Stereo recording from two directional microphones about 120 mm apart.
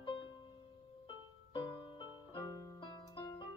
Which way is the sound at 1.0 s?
45° left (ahead or behind).